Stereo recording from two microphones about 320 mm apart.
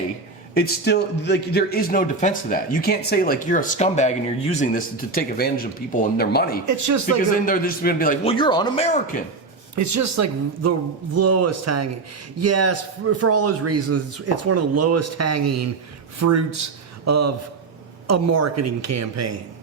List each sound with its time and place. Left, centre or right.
0.5 s a man's voice: left
6.7 s speech: right
7.2 s a man's voice: left
9.7 s a man's voice: right